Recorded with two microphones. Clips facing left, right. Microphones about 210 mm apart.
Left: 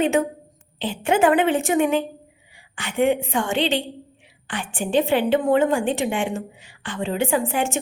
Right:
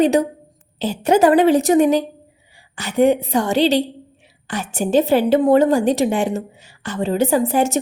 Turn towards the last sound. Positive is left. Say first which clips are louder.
# right 6 dB
turn(degrees=-40)  # may be behind; listen again after turning